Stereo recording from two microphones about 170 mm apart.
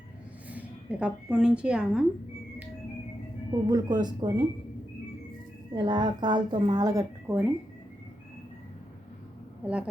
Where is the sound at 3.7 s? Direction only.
25° right (ahead or behind).